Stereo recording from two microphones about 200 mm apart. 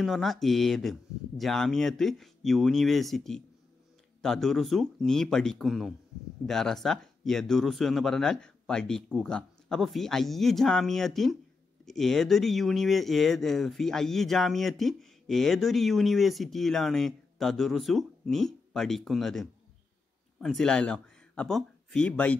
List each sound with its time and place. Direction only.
0.0 s speech: centre (ahead or behind)